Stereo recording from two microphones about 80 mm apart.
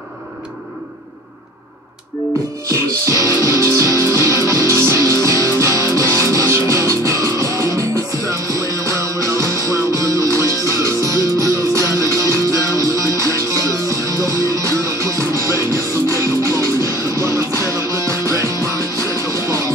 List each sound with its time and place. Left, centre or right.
2.7 s music: right